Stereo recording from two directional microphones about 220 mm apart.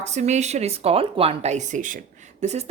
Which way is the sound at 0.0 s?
30° right (ahead or behind).